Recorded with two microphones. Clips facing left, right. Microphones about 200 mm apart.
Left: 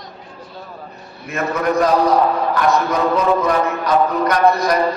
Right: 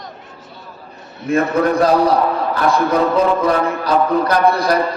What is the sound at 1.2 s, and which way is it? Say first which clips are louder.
Speech: right 5 dB; 30° right (ahead or behind).